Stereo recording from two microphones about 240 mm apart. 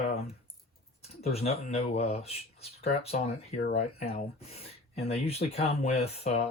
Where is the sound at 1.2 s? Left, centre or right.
Left.